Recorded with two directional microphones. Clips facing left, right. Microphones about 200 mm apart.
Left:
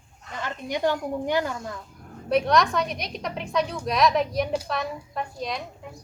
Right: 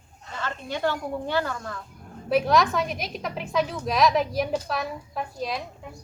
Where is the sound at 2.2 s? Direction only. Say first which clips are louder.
Even; centre (ahead or behind).